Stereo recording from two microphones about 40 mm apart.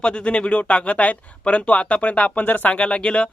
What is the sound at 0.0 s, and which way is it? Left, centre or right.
Speech, left.